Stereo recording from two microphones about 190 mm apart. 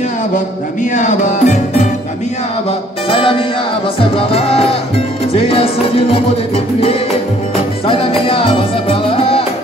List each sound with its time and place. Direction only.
0.9 s music: 40° left (ahead or behind)
3.1 s music: 30° left (ahead or behind)